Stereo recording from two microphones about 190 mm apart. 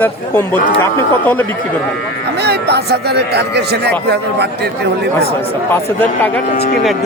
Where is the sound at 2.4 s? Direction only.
60° right (ahead or behind).